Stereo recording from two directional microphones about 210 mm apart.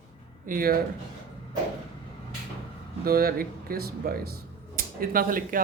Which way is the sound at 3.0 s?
45° right (ahead or behind).